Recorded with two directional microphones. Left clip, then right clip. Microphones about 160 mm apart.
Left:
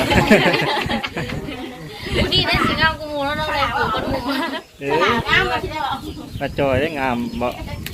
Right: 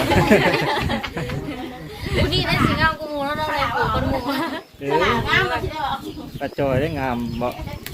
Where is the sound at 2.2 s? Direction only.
50° right (ahead or behind).